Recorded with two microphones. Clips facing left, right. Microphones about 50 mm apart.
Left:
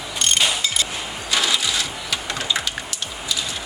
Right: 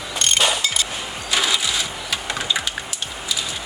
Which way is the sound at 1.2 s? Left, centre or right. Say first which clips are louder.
Even; centre.